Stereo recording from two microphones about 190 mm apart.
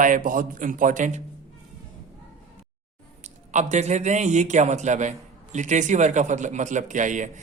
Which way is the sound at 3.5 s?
40° right (ahead or behind).